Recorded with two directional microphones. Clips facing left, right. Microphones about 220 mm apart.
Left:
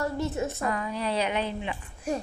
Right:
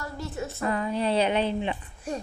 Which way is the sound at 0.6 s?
30° right (ahead or behind).